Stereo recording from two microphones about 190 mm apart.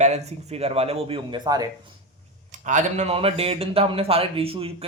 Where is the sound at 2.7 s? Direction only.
40° right (ahead or behind).